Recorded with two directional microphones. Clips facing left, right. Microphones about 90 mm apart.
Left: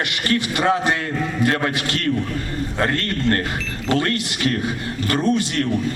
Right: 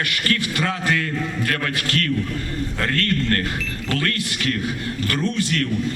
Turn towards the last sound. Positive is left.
turn(degrees=25)  # may be behind; listen again after turning